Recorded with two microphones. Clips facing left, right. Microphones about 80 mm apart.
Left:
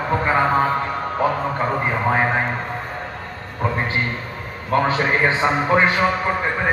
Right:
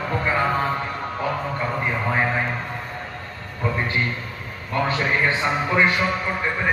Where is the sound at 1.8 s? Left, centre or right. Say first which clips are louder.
Left 2 dB; left.